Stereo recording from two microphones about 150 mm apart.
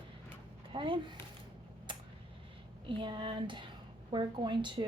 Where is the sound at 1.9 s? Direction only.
35° right (ahead or behind).